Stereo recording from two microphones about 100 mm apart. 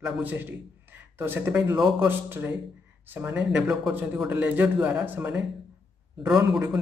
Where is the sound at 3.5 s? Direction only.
5° right (ahead or behind).